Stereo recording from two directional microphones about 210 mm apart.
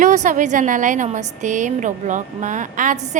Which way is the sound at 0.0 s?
35° right (ahead or behind).